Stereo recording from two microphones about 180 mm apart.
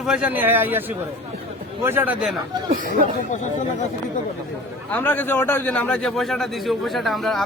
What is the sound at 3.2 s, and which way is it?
Speech, 45° left (ahead or behind).